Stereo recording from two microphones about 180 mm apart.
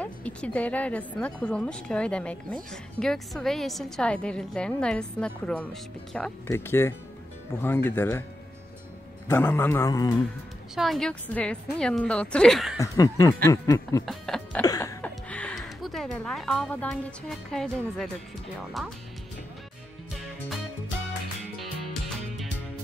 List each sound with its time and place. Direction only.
0.0 s a woman's voice: 5° left (ahead or behind)
9.3 s a man's voice: 10° left (ahead or behind)
10.7 s a woman's voice: centre (ahead or behind)
12.7 s a man's voice: 20° left (ahead or behind)
14.0 s speech: centre (ahead or behind)
14.6 s a sound: 20° left (ahead or behind); by 18.1 s centre (ahead or behind)
18.8 s a woman's voice: centre (ahead or behind)
20.2 s music: centre (ahead or behind)